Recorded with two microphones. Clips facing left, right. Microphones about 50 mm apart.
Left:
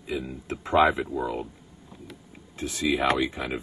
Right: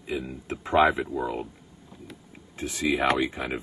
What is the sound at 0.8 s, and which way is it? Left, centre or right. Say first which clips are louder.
Speech: even; right.